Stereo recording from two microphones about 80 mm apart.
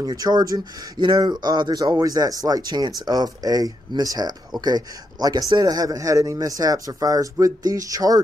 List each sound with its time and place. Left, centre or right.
0.0 s speech: right
0.9 s speech: right